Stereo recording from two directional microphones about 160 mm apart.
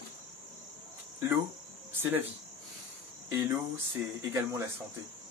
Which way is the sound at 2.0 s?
15° right (ahead or behind).